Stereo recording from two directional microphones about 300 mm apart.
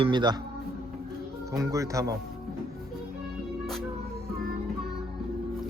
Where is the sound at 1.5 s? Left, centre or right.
Centre.